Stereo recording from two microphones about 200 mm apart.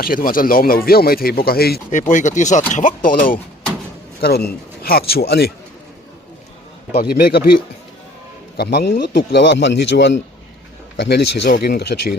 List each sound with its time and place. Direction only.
0.0 s speech: 45° left (ahead or behind)
6.9 s speech: 50° left (ahead or behind)
8.5 s a man's voice: 55° left (ahead or behind)